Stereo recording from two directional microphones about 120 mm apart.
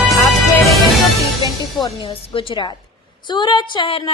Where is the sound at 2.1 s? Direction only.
50° left (ahead or behind).